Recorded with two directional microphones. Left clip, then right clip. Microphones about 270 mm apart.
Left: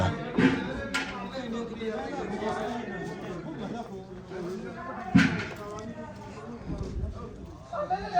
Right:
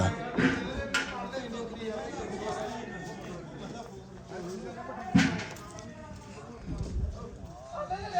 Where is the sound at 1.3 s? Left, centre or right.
Right.